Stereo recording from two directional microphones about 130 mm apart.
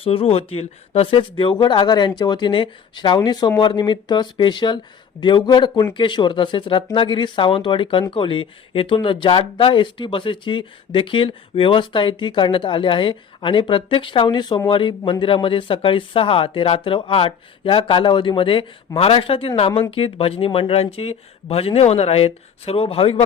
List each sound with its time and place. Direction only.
0.0 s speech: 45° left (ahead or behind)